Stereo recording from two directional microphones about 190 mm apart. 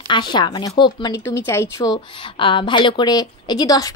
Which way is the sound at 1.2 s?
15° left (ahead or behind).